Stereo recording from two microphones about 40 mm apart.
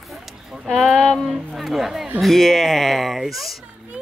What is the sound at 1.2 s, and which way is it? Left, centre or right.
Speech, centre.